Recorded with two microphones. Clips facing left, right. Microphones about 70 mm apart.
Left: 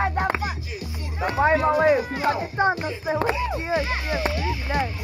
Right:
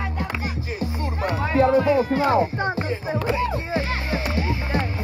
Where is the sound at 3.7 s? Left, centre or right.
Right.